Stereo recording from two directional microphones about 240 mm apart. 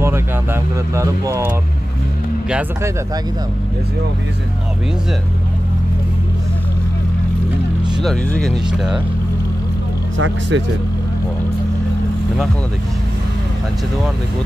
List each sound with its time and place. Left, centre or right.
0.0 s speech: centre
8.0 s speech: centre
10.1 s speech: right